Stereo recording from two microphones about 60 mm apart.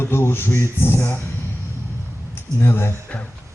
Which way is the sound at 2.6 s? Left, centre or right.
Left.